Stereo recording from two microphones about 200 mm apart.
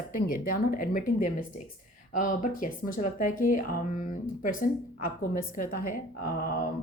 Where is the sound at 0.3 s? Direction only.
45° left (ahead or behind).